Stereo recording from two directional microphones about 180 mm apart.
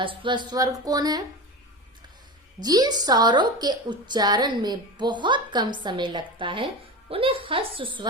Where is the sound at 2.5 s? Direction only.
20° right (ahead or behind).